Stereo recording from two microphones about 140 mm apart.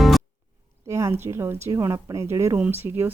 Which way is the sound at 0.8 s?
20° right (ahead or behind).